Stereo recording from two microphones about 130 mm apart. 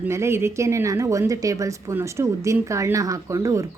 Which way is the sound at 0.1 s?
20° right (ahead or behind).